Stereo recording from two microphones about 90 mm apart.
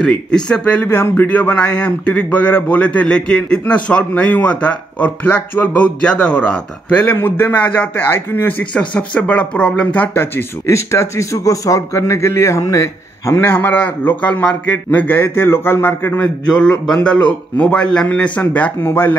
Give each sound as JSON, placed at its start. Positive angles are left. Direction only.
{"t": 0.0, "sound": "a man's voice", "side_deg": 10}
{"t": 0.8, "sound": "a man's voice", "side_deg": 25}
{"t": 9.9, "sound": "speech", "side_deg": 25}
{"t": 16.8, "sound": "a man's voice", "side_deg": 10}